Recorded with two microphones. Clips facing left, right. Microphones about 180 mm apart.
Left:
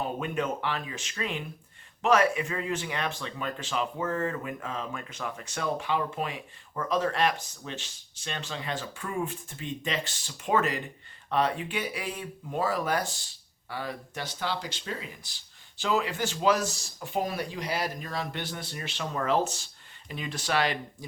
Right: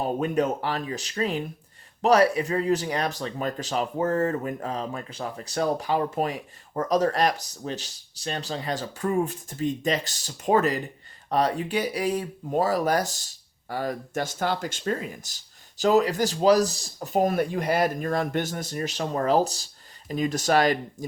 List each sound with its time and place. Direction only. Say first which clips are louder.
0.0 s speech: right 6 dB; 40° right (ahead or behind)